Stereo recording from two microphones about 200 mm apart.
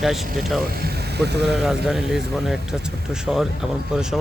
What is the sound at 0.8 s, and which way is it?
Vehicle, 55° right (ahead or behind).